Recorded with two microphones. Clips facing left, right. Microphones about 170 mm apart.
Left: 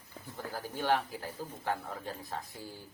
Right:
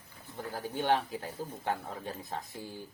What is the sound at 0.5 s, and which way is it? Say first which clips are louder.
A man's voice: right 2 dB; 25° right (ahead or behind).